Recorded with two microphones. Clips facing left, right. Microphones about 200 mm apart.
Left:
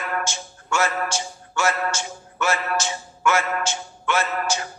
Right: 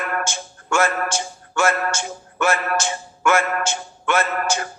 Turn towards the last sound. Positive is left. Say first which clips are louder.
# right 3 dB
turn(degrees=-55)  # may be behind; listen again after turning